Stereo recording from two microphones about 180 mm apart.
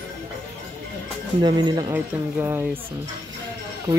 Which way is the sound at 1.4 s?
25° right (ahead or behind).